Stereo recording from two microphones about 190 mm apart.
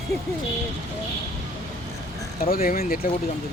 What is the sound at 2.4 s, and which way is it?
Speech, 50° left (ahead or behind).